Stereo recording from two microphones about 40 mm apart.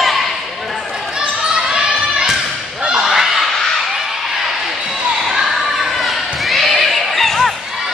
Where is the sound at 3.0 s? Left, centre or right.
Centre.